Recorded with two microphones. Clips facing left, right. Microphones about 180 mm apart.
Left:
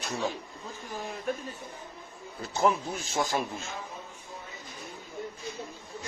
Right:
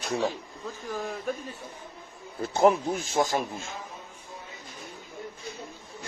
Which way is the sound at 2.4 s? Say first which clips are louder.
Right 5 dB; 55° right (ahead or behind).